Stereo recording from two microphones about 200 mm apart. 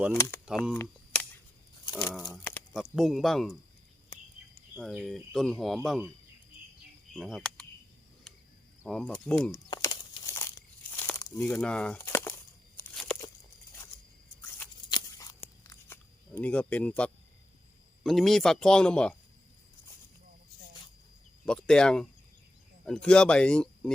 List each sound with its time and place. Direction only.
0.1 s speech: 10° left (ahead or behind)
0.8 s cap gun: 5° left (ahead or behind)
2.1 s a sound: centre (ahead or behind)
2.9 s speech: centre (ahead or behind)
4.5 s speech: centre (ahead or behind)
7.1 s a sound: centre (ahead or behind)
8.9 s speech: 5° left (ahead or behind)
9.6 s crumpling: 20° left (ahead or behind)
10.9 s a sound: 10° left (ahead or behind)
14.8 s a sound: 20° left (ahead or behind)
18.0 s speech: centre (ahead or behind)
21.4 s speech: 5° left (ahead or behind)